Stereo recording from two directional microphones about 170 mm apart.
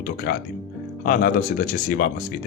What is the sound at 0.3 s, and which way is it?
Speech, 65° left (ahead or behind).